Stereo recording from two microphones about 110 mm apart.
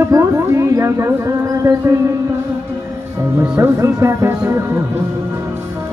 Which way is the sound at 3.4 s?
15° right (ahead or behind).